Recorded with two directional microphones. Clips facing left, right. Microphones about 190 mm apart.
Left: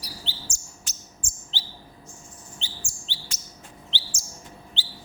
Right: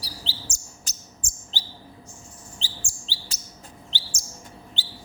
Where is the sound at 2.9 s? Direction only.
35° right (ahead or behind).